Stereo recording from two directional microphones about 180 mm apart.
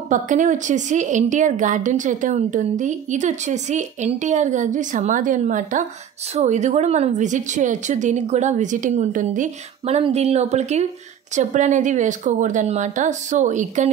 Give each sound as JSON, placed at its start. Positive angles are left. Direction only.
{"t": 0.1, "sound": "a woman's voice", "side_deg": -45}